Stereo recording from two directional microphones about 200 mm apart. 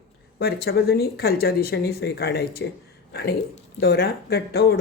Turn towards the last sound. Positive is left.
turn(degrees=55)  # may be behind; listen again after turning